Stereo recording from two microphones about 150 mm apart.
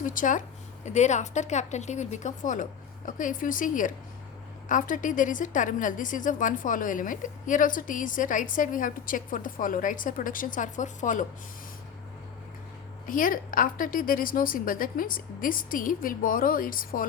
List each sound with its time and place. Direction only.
0.0 s a woman's voice: 60° left (ahead or behind)
13.1 s a woman's voice: 65° left (ahead or behind)